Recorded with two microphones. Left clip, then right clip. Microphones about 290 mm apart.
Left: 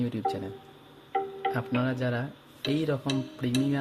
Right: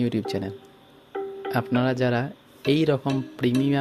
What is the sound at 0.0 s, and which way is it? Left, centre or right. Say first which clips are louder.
Speech: right 3 dB; right.